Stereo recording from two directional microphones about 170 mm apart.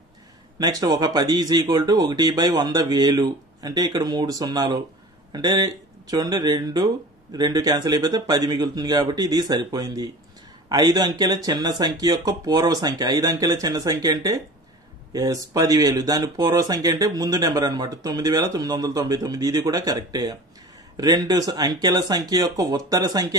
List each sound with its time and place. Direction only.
0.6 s speech: 25° right (ahead or behind)